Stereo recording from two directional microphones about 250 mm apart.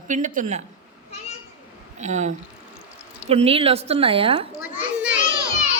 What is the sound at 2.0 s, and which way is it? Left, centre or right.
A child's voice, right.